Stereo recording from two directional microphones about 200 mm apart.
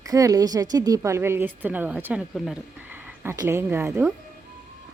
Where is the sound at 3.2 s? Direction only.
10° right (ahead or behind).